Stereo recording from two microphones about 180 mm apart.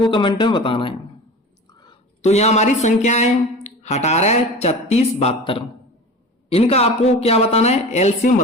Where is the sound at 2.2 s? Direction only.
40° left (ahead or behind).